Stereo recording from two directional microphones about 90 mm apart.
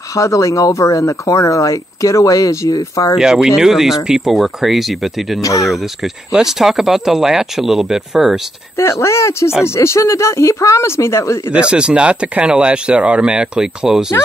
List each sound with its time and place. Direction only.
0.1 s speech: 35° left (ahead or behind)
3.2 s speech: 5° right (ahead or behind)
5.4 s speech: 40° left (ahead or behind)
5.7 s speech: centre (ahead or behind)
8.7 s speech: 35° left (ahead or behind)
11.5 s speech: 10° right (ahead or behind)